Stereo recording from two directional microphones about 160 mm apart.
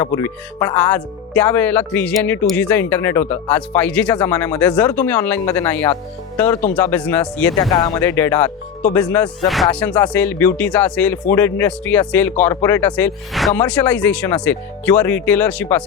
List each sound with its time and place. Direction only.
0.0 s speech: 15° left (ahead or behind)
7.7 s speech: 25° left (ahead or behind)
8.0 s speech: 15° left (ahead or behind)